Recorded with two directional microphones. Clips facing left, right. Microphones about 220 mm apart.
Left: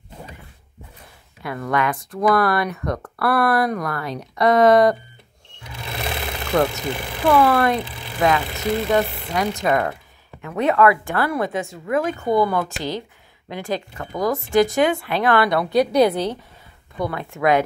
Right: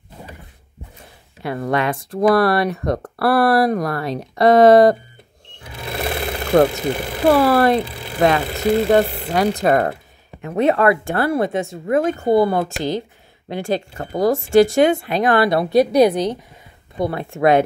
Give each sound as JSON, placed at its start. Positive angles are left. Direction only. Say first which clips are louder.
{"t": 1.4, "sound": "speech", "louder": "right 2 dB", "side_deg": -30}
{"t": 6.5, "sound": "speech", "louder": "right 6 dB", "side_deg": -25}
{"t": 12.7, "sound": "speech", "louder": "right 5 dB", "side_deg": -50}
{"t": 13.5, "sound": "speech", "louder": "right 4 dB", "side_deg": -30}
{"t": 14.9, "sound": "speech", "louder": "right 3 dB", "side_deg": -20}
{"t": 16.9, "sound": "speech", "louder": "right 4 dB", "side_deg": -30}